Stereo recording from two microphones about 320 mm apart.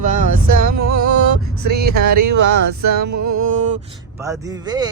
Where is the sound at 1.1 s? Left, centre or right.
Right.